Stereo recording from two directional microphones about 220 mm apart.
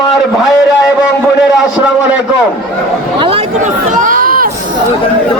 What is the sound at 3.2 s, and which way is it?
Speech, 25° right (ahead or behind).